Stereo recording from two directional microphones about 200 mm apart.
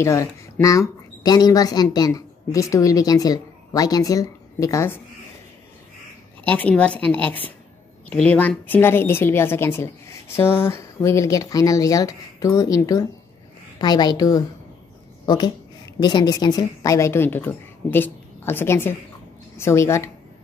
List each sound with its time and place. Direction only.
0.0 s speech: 15° left (ahead or behind)
6.4 s a woman's voice: 10° left (ahead or behind)